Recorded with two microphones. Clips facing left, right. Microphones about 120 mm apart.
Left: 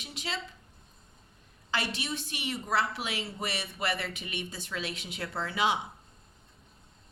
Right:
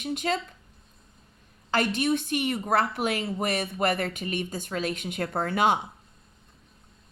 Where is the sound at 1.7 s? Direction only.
50° right (ahead or behind).